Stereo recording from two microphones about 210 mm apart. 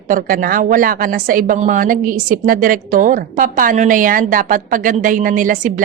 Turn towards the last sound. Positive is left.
turn(degrees=-40)  # may be behind; listen again after turning